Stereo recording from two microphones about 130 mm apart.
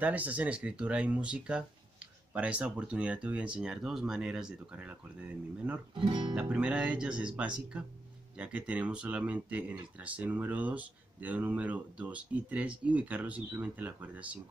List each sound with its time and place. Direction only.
0.0 s speech: 10° right (ahead or behind)
5.9 s speech: 35° right (ahead or behind)
6.3 s speech: 5° right (ahead or behind)